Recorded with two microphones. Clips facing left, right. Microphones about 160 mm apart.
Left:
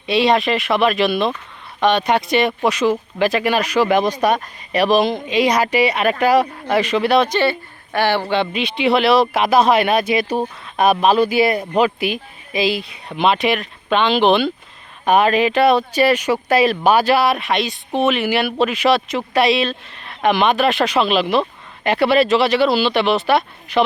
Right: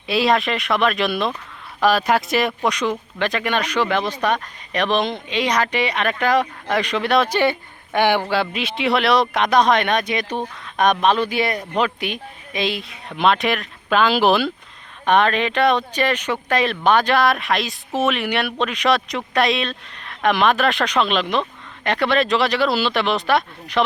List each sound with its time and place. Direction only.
0.1 s speech: centre (ahead or behind)
7.3 s speech: 10° right (ahead or behind)
8.3 s speech: centre (ahead or behind)
15.0 s speech: 10° left (ahead or behind)